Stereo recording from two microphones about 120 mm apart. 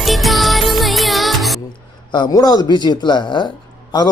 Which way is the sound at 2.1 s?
35° left (ahead or behind).